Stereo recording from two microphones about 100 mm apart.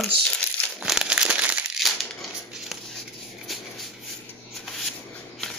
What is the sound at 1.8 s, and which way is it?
Crumpling, centre (ahead or behind).